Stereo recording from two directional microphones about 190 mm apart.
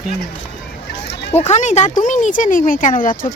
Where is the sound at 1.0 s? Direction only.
60° left (ahead or behind).